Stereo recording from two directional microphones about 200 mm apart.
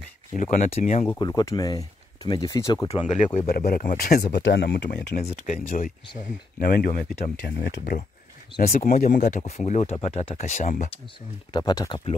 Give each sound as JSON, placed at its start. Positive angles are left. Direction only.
{"t": 0.3, "sound": "speech", "side_deg": 40}
{"t": 1.2, "sound": "speech", "side_deg": 20}
{"t": 3.4, "sound": "speech", "side_deg": 45}
{"t": 11.5, "sound": "speech", "side_deg": 20}